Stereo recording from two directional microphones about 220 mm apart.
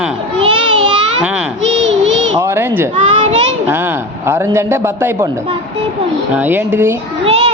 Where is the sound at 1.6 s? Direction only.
60° right (ahead or behind).